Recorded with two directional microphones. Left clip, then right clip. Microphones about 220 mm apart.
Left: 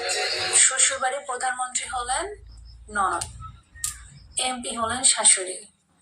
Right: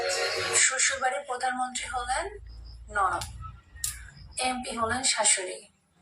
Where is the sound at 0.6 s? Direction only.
30° left (ahead or behind).